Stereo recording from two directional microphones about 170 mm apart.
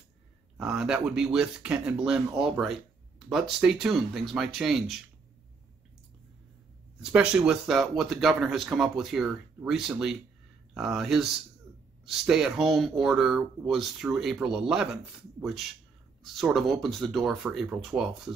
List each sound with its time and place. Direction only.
0.6 s speech: 5° right (ahead or behind)
7.0 s speech: 5° right (ahead or behind)
16.2 s speech: centre (ahead or behind)